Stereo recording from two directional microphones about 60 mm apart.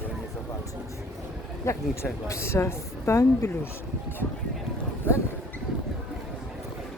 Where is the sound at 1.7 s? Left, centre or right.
Left.